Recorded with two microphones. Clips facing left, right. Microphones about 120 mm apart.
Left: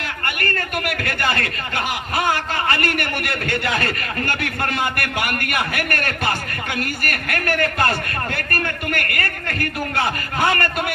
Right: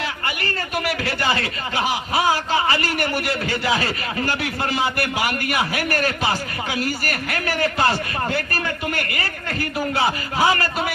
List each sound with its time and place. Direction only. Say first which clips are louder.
0.0 s a man's voice: even; 55° left (ahead or behind)